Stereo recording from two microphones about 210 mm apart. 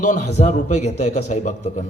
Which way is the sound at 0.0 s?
35° left (ahead or behind).